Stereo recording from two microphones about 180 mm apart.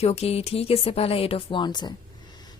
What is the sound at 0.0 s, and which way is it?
Speech, 35° left (ahead or behind).